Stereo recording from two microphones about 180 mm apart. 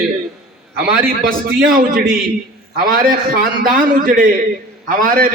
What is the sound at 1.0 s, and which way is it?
A man's voice, 55° right (ahead or behind).